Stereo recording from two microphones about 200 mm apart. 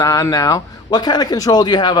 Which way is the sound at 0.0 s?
15° left (ahead or behind).